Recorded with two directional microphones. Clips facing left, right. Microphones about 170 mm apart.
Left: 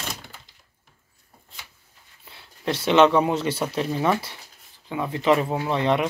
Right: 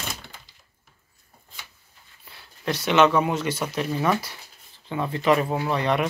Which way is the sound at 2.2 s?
25° left (ahead or behind).